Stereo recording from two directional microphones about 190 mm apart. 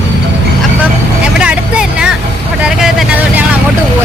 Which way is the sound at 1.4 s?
5° right (ahead or behind).